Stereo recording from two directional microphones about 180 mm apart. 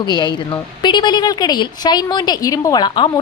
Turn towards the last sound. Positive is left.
turn(degrees=25)  # may be behind; listen again after turning